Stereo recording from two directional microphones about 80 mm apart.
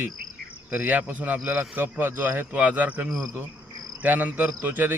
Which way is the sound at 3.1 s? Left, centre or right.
Centre.